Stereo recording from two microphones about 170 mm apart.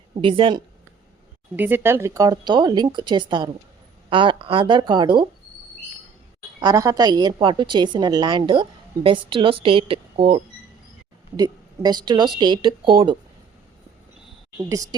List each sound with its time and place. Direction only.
0.2 s a woman's voice: 30° right (ahead or behind)
1.5 s a woman's voice: 10° right (ahead or behind); by 5.2 s 25° right (ahead or behind)
6.6 s a woman's voice: 20° right (ahead or behind)